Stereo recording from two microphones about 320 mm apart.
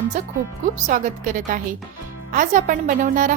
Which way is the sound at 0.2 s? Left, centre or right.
Right.